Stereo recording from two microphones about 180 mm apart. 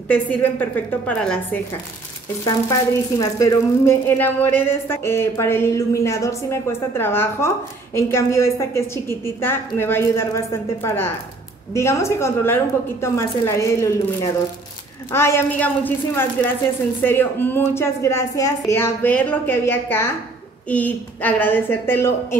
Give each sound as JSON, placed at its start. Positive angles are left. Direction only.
{"t": 0.1, "sound": "a woman's voice", "side_deg": 10}
{"t": 2.4, "sound": "a woman's voice", "side_deg": 20}